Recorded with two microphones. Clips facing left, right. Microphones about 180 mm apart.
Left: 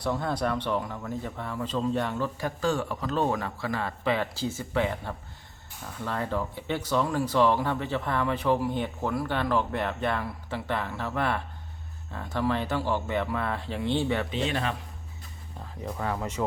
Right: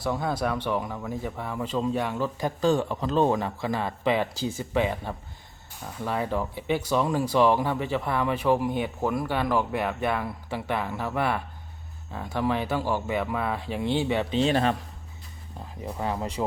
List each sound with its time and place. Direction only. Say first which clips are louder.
0.1 s speech: right 1 dB; 5° right (ahead or behind)
14.3 s speech: right 6 dB; 35° right (ahead or behind)
16.0 s speech: right 2 dB; 20° right (ahead or behind)